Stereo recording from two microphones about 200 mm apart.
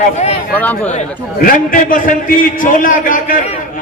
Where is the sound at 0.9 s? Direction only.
40° left (ahead or behind).